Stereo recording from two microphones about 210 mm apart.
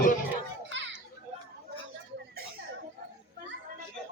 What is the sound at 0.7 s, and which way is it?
Children playing, 60° right (ahead or behind).